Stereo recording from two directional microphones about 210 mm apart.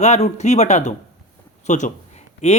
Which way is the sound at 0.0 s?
35° left (ahead or behind).